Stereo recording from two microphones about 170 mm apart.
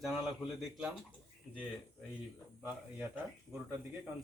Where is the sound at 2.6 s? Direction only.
10° right (ahead or behind).